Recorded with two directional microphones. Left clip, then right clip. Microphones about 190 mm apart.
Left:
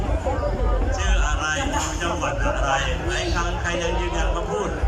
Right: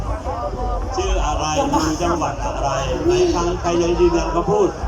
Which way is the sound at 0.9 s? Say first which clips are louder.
Right 5 dB; 45° right (ahead or behind).